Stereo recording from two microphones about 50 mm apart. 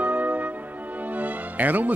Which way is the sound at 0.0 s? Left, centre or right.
Right.